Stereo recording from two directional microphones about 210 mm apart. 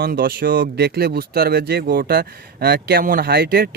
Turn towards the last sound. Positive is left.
turn(degrees=-45)  # may be behind; listen again after turning